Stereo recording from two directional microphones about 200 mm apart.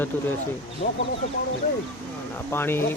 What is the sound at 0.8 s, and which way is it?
Speech, 35° left (ahead or behind).